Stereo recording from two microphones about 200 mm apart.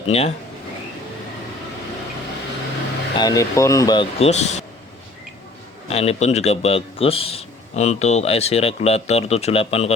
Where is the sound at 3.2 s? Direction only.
20° left (ahead or behind).